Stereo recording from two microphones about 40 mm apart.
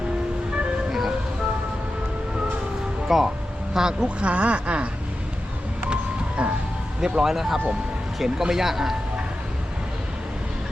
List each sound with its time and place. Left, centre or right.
0.9 s ice cream truck: centre
3.1 s speech: centre
3.8 s a man's voice: centre
4.2 s speech: right
5.9 s music: right
7.0 s a man's voice: centre